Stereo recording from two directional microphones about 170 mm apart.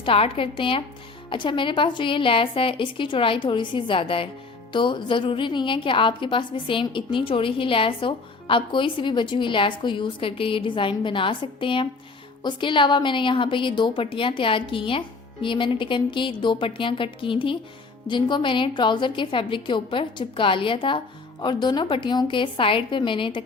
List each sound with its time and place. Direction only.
0.0 s a woman's voice: 30° left (ahead or behind)